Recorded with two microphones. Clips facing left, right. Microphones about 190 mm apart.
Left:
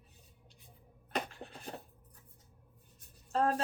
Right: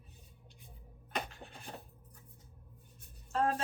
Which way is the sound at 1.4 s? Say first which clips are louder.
Left 3 dB; 35° left (ahead or behind).